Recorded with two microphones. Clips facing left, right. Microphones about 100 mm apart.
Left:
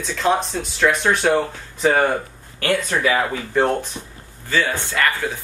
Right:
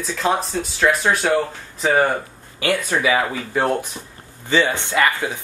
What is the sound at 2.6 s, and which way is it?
Speech, 10° right (ahead or behind).